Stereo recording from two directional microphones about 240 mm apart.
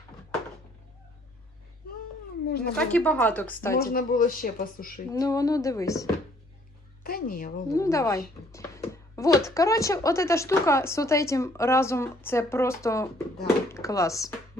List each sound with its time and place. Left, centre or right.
2.5 s a sound: left
2.7 s speech: centre
3.8 s speech: left
5.1 s speech: centre
7.0 s a sound: left
7.7 s speech: centre